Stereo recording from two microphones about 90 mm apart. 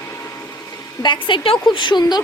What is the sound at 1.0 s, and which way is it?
A woman's voice, 65° left (ahead or behind).